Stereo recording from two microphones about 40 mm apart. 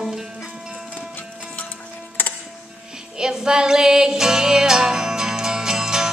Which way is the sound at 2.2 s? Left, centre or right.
Left.